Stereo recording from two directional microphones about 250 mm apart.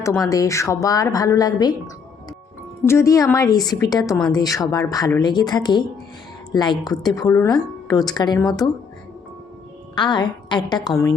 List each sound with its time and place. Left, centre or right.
0.0 s a woman's voice: centre
2.8 s a woman's voice: centre
9.9 s a woman's voice: centre